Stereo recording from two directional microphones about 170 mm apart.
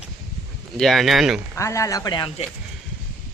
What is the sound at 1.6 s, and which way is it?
Speech, 20° left (ahead or behind).